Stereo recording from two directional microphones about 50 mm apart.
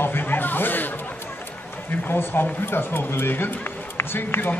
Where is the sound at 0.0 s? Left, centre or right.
Left.